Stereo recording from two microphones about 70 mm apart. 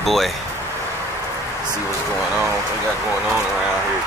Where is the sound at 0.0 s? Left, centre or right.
Centre.